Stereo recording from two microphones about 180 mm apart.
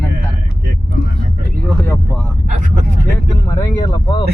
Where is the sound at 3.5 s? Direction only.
20° left (ahead or behind).